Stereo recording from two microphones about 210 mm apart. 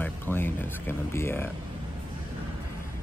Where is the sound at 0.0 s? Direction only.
10° left (ahead or behind).